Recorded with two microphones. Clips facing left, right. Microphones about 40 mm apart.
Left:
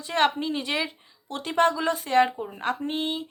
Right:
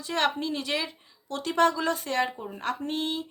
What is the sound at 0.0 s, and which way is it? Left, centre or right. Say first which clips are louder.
Speech: left 3 dB; left.